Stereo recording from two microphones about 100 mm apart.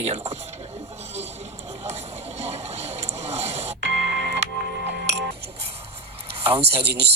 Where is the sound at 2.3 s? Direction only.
90° right.